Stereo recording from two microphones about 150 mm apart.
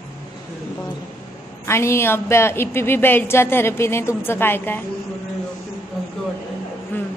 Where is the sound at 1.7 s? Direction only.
15° left (ahead or behind).